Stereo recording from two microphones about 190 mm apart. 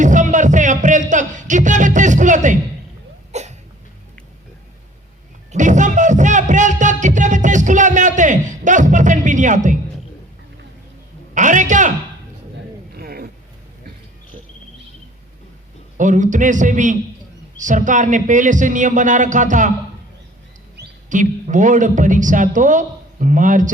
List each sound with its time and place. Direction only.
0.0 s speech: 40° right (ahead or behind)
3.3 s hiccup: 35° right (ahead or behind)
5.5 s music: 40° right (ahead or behind)
11.3 s a sound: 40° right (ahead or behind)
12.9 s a sound: 55° right (ahead or behind)
16.0 s a man's voice: 40° right (ahead or behind)
21.1 s a man's voice: 40° right (ahead or behind)